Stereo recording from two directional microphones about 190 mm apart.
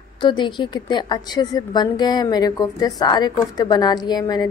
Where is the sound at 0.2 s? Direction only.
25° left (ahead or behind).